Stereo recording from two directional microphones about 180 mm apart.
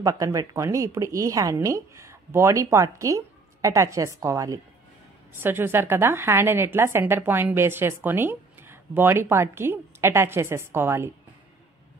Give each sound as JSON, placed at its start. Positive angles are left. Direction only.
{"t": 0.0, "sound": "a woman's voice", "side_deg": -20}